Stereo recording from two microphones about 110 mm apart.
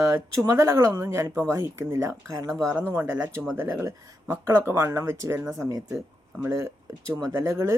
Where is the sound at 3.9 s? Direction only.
35° right (ahead or behind).